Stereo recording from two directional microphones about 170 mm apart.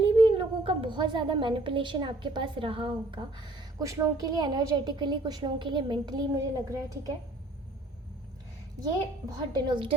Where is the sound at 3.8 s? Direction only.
20° right (ahead or behind).